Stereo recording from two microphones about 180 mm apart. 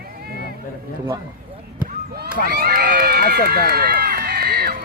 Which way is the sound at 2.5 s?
55° right (ahead or behind).